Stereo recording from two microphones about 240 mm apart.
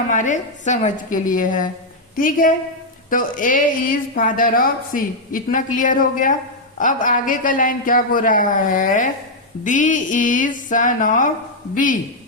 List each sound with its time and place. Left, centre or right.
0.1 s speech: left